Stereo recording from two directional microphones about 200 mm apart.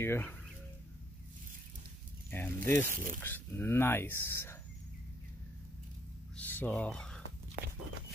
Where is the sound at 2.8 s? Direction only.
45° right (ahead or behind).